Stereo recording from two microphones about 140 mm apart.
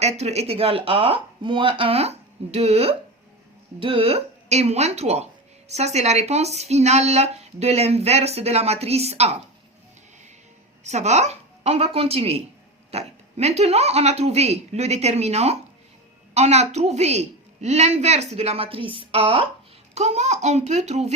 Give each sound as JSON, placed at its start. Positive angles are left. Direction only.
{"t": 0.0, "sound": "a woman's voice", "side_deg": -50}
{"t": 10.8, "sound": "a woman's voice", "side_deg": -55}
{"t": 19.9, "sound": "a woman's voice", "side_deg": -55}